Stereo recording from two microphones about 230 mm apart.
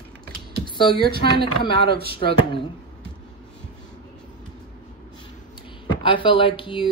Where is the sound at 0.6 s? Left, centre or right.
Centre.